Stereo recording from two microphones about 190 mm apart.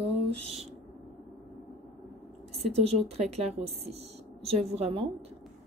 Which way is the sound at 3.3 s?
35° right (ahead or behind).